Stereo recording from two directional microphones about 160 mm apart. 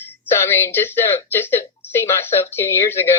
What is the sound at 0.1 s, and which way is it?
Speech, 15° left (ahead or behind).